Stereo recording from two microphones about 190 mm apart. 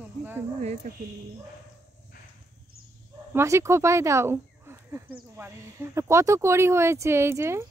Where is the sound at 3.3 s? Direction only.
15° right (ahead or behind).